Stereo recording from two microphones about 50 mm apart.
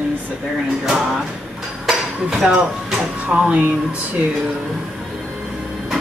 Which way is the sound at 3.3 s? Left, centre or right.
Right.